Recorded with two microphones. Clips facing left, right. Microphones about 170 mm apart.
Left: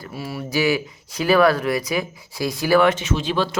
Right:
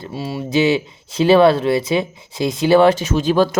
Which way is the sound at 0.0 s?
25° right (ahead or behind).